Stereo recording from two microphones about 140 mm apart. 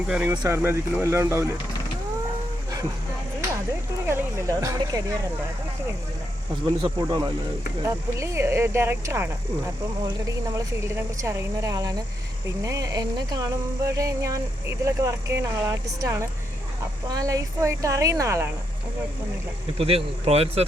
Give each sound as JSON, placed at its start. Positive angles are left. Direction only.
{"t": 0.1, "sound": "speech", "side_deg": -15}
{"t": 4.0, "sound": "speech", "side_deg": -20}
{"t": 6.7, "sound": "speech", "side_deg": -30}
{"t": 7.8, "sound": "speech", "side_deg": -20}
{"t": 20.2, "sound": "speech", "side_deg": -45}